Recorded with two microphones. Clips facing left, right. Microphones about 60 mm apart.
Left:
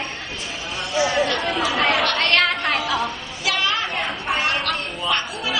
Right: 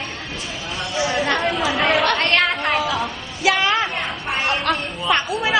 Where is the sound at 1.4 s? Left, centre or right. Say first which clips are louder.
Right 1 dB; centre.